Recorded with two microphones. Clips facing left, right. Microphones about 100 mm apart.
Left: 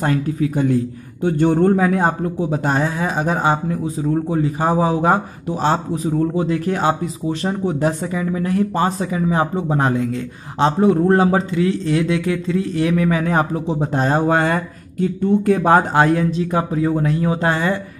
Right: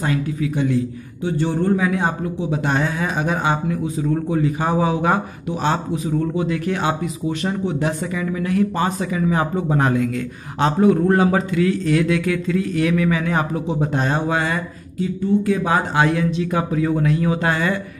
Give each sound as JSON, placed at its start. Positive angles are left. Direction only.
{"t": 0.0, "sound": "a man's voice", "side_deg": 40}